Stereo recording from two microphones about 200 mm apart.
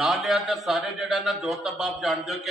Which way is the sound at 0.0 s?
Centre (ahead or behind).